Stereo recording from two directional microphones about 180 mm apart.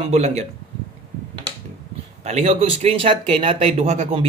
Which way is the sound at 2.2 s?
40° right (ahead or behind).